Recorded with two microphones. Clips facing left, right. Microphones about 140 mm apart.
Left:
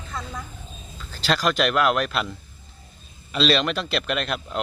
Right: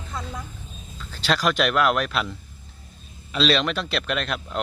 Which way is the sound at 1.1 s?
Centre (ahead or behind).